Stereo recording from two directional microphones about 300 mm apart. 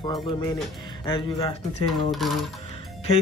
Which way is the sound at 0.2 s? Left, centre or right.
Centre.